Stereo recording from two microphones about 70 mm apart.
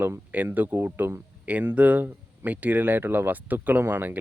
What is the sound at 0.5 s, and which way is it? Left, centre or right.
Speech, right.